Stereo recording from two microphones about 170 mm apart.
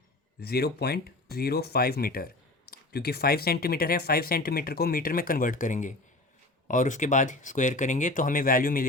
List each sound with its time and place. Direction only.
0.3 s speech: 65° left (ahead or behind)